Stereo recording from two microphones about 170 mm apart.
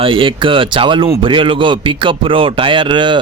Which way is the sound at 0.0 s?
30° right (ahead or behind).